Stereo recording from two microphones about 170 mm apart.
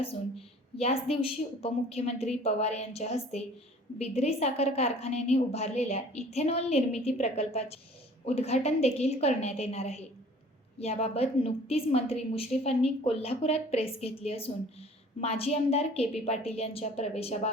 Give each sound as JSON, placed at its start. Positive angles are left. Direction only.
{"t": 0.8, "sound": "a woman's voice", "side_deg": 35}